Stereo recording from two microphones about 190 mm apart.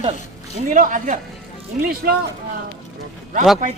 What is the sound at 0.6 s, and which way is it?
Speech, 45° right (ahead or behind).